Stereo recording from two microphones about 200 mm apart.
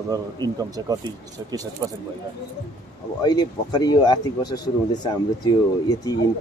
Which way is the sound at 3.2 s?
20° left (ahead or behind).